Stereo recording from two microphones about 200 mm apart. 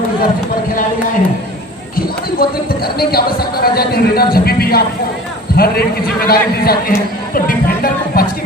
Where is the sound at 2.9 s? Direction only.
50° left (ahead or behind).